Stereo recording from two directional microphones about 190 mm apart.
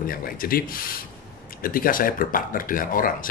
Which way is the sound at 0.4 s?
50° left (ahead or behind).